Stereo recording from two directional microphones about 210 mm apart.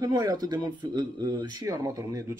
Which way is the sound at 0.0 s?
15° right (ahead or behind).